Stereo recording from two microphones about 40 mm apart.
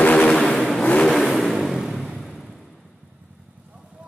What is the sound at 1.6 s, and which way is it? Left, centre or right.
Vehicle, centre.